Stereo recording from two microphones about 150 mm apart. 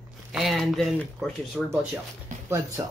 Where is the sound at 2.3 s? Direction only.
60° right (ahead or behind).